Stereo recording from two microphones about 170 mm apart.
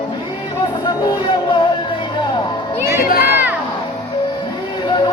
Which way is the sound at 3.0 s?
60° left (ahead or behind).